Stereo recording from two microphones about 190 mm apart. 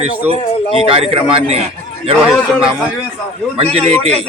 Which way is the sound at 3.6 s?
35° right (ahead or behind).